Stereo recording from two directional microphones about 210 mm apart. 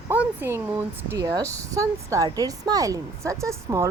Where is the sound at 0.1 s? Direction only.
10° right (ahead or behind).